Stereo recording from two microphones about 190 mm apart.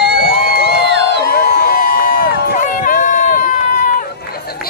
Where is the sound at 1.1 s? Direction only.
60° left (ahead or behind).